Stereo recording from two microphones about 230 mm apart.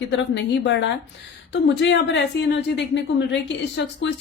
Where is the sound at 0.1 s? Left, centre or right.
Left.